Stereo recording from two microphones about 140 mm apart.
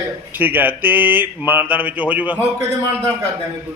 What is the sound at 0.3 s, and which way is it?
Mantra, 15° right (ahead or behind).